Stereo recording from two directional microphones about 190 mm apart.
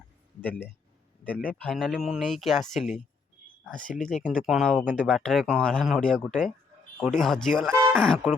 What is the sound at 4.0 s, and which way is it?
Speech, centre (ahead or behind).